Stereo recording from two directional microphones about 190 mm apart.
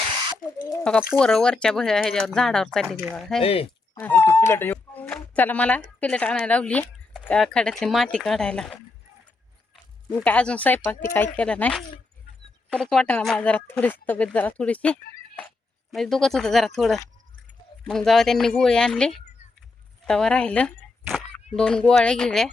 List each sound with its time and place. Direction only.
0.4 s a sound: 45° left (ahead or behind)
1.1 s speech: 5° left (ahead or behind)
2.8 s speech: 15° right (ahead or behind)
3.2 s speech: centre (ahead or behind)
3.4 s speech: 30° left (ahead or behind)
3.9 s speech: 10° left (ahead or behind)
10.2 s speech: 5° left (ahead or behind)